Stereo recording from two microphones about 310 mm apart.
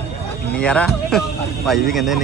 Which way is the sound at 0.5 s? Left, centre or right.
Centre.